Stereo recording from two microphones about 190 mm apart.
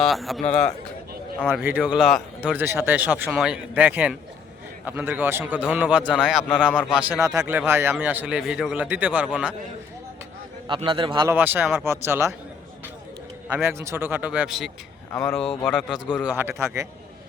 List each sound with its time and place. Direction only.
0.0 s a man's voice: centre (ahead or behind)
7.2 s a man's voice: 15° right (ahead or behind)
10.7 s a man's voice: 25° right (ahead or behind)
11.3 s a man's voice: 10° right (ahead or behind)
13.5 s a man's voice: 15° right (ahead or behind)
16.2 s a man's voice: 10° right (ahead or behind)